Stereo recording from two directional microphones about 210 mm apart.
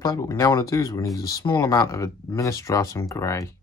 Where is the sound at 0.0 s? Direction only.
15° left (ahead or behind).